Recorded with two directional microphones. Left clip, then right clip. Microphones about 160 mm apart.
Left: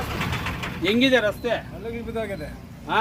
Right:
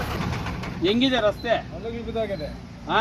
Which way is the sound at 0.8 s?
35° left (ahead or behind).